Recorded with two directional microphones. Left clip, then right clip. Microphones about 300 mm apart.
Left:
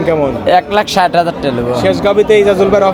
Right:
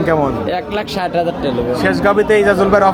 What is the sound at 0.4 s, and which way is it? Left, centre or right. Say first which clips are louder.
Speech: left 9 dB; left.